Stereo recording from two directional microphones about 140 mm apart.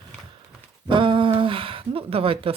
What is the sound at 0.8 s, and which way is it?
Speech, 35° right (ahead or behind).